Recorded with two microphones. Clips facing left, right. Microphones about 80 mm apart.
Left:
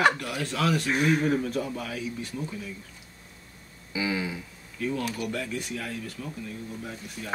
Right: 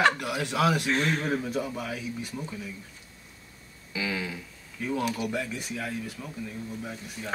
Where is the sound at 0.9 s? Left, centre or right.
Centre.